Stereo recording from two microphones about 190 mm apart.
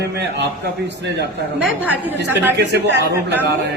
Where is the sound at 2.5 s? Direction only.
60° right (ahead or behind).